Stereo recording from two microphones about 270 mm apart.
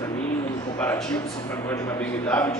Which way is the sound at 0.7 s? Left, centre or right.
Centre.